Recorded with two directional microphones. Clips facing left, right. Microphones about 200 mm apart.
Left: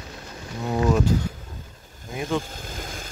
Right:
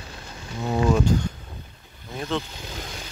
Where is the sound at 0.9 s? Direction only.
5° left (ahead or behind).